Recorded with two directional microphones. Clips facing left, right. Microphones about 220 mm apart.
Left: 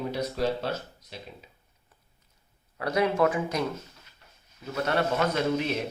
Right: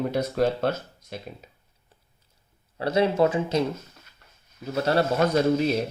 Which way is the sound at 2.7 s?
30° right (ahead or behind).